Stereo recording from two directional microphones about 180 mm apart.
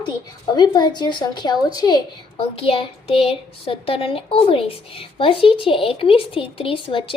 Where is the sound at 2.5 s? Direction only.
30° left (ahead or behind).